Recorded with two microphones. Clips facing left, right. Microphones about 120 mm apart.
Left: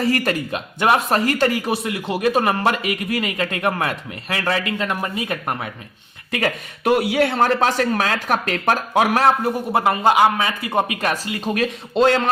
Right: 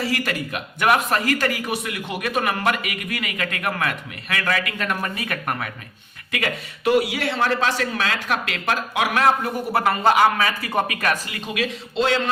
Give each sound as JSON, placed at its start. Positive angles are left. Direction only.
{"t": 0.0, "sound": "speech", "side_deg": 45}
{"t": 0.5, "sound": "a man's voice", "side_deg": 30}
{"t": 6.8, "sound": "speech", "side_deg": 55}
{"t": 11.3, "sound": "speech", "side_deg": 40}